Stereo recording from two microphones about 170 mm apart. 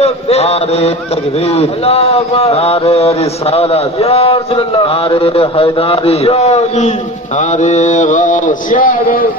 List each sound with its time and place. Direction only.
0.0 s mantra: 40° left (ahead or behind); by 9.3 s 55° left (ahead or behind)